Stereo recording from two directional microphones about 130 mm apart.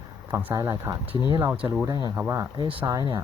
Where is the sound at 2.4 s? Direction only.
30° right (ahead or behind).